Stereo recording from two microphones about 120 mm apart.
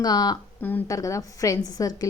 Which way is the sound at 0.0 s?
35° left (ahead or behind).